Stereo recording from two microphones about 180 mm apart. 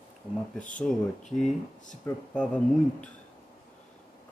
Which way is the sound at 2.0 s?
10° left (ahead or behind).